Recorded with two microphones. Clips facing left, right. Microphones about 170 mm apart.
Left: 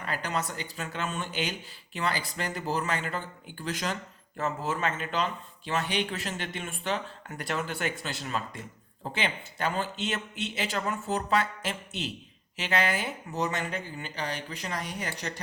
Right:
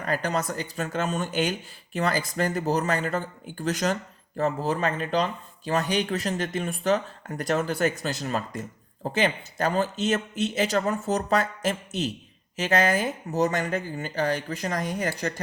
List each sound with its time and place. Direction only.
0.0 s speech: 45° right (ahead or behind)